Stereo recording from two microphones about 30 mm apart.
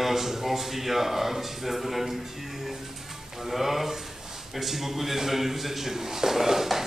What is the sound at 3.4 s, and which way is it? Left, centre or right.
A man's voice, centre.